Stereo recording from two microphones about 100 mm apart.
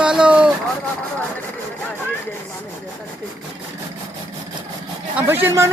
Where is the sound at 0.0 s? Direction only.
10° right (ahead or behind).